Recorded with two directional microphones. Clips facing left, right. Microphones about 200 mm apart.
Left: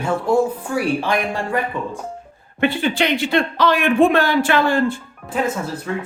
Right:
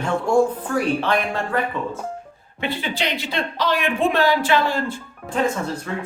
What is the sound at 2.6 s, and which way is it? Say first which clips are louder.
Speech: left 7 dB; 55° left (ahead or behind).